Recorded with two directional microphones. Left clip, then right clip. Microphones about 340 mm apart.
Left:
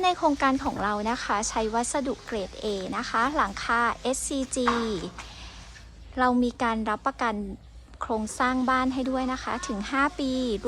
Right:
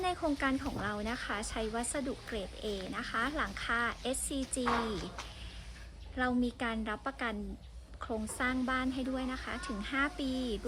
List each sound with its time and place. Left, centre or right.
0.0 s speech: centre
6.1 s speech: centre